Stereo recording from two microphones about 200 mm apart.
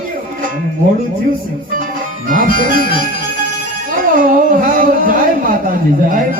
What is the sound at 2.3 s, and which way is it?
Speech, 45° right (ahead or behind).